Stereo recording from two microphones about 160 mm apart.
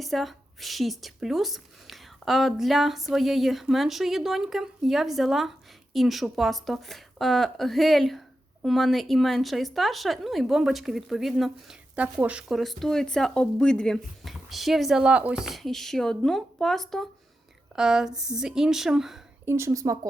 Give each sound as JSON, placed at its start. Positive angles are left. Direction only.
{"t": 0.0, "sound": "speech", "side_deg": 0}
{"t": 19.5, "sound": "speech", "side_deg": -15}